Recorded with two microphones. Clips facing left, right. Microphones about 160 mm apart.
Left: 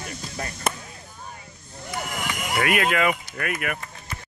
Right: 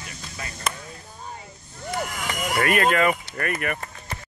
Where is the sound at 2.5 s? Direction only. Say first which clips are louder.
Right 2 dB; 5° left (ahead or behind).